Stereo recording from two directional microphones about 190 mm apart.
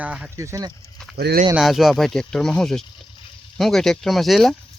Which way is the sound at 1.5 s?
Centre (ahead or behind).